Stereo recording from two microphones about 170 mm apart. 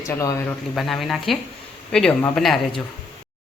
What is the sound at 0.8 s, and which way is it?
A woman's voice, centre (ahead or behind).